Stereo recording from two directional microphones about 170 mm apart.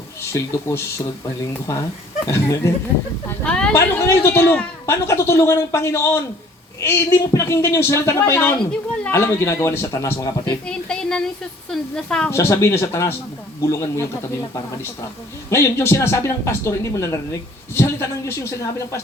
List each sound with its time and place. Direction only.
0.2 s speech: 15° left (ahead or behind)
2.2 s speech: 15° left (ahead or behind)
3.2 s speech: 5° left (ahead or behind)
10.7 s speech: 5° left (ahead or behind)
15.4 s speech: 15° left (ahead or behind)